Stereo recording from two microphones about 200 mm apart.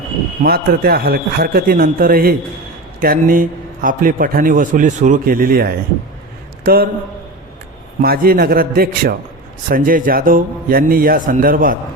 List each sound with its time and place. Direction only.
0.4 s a man's voice: 50° right (ahead or behind)
8.0 s a man's voice: 50° right (ahead or behind)